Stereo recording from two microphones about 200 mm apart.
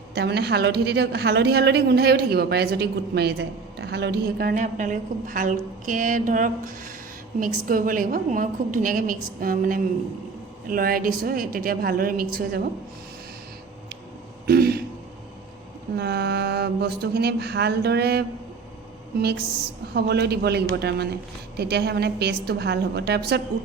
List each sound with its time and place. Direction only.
0.1 s a woman's voice: 55° right (ahead or behind)
14.4 s throat clearing: 50° right (ahead or behind)
16.0 s a man's voice: 55° right (ahead or behind)
19.9 s a man's voice: 55° right (ahead or behind)